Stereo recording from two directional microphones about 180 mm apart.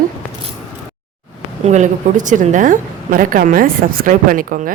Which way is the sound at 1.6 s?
40° right (ahead or behind).